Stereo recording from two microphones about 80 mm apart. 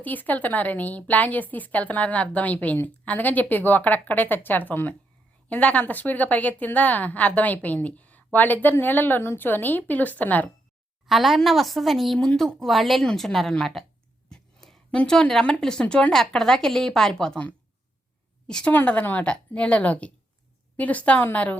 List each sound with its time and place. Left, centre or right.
0.0 s a woman's voice: left
11.0 s a woman's voice: centre
14.3 s a sound: centre
14.9 s a woman's voice: centre
18.4 s a woman's voice: centre
18.7 s a woman's voice: left